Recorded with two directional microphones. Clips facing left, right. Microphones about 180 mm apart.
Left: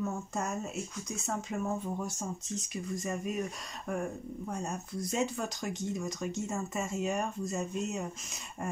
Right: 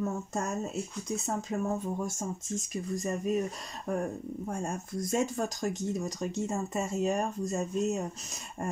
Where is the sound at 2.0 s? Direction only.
45° right (ahead or behind).